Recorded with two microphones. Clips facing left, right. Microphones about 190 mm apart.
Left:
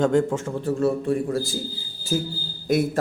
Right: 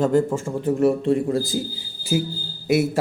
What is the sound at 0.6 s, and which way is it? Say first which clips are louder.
A man's voice: right 4 dB; 15° right (ahead or behind).